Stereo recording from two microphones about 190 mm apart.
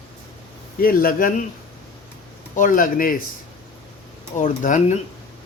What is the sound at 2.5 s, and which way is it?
Speech, 45° left (ahead or behind).